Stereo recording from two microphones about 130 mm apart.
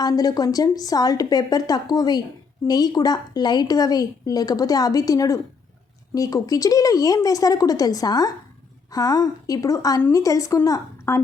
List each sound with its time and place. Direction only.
0.0 s speech: 30° left (ahead or behind)